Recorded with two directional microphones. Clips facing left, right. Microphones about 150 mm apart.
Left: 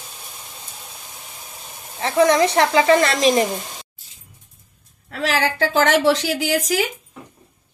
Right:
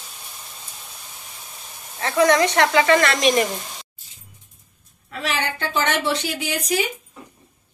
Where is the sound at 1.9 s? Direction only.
25° left (ahead or behind).